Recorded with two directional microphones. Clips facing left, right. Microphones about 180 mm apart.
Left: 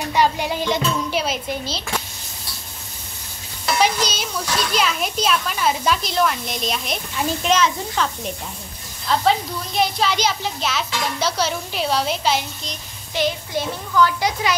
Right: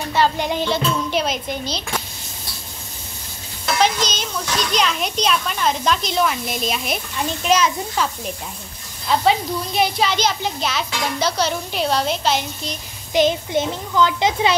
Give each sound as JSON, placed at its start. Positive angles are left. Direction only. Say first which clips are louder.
{"t": 0.1, "sound": "speech", "louder": "right 1 dB", "side_deg": 10}
{"t": 3.8, "sound": "a child's voice", "louder": "right 1 dB", "side_deg": 10}
{"t": 7.5, "sound": "a child's voice", "louder": "right 2 dB", "side_deg": -10}
{"t": 9.1, "sound": "a child's voice", "louder": "right 1 dB", "side_deg": -5}
{"t": 13.1, "sound": "a child's voice", "louder": "right 5 dB", "side_deg": -20}